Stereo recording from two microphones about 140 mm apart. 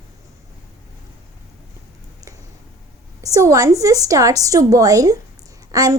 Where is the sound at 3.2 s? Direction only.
25° right (ahead or behind).